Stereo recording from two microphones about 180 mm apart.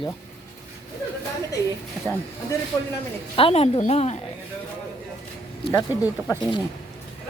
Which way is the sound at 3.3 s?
30° left (ahead or behind).